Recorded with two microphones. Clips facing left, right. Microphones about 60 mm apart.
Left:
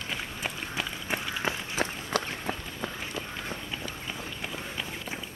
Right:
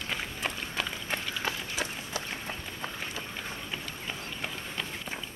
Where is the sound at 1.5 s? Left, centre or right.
Left.